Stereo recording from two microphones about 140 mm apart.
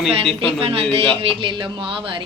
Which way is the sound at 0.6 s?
45° right (ahead or behind).